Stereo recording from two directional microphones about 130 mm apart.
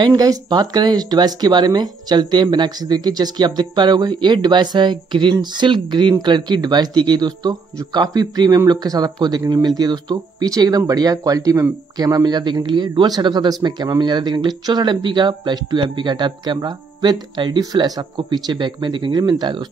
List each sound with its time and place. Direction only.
0.0 s speech: 30° right (ahead or behind)